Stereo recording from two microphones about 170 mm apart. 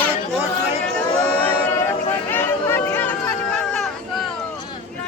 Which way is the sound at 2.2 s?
10° left (ahead or behind).